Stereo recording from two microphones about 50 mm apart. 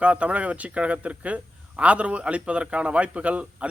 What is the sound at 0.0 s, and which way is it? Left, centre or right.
A man's voice, right.